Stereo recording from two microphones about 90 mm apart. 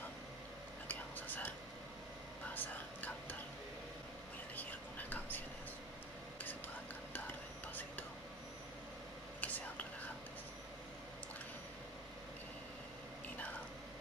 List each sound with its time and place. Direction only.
0.8 s whispering: 20° left (ahead or behind)
4.6 s whispering: 20° left (ahead or behind)
7.1 s whispering: 20° left (ahead or behind)
9.4 s whispering: 15° left (ahead or behind)